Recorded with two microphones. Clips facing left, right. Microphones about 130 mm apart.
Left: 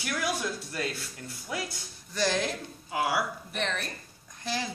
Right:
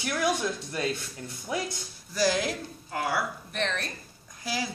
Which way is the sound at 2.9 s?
10° left (ahead or behind).